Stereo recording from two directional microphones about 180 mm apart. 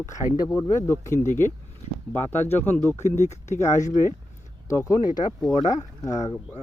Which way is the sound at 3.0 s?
40° left (ahead or behind).